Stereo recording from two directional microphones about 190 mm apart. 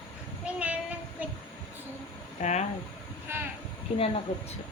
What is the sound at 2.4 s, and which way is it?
Speech, 35° left (ahead or behind).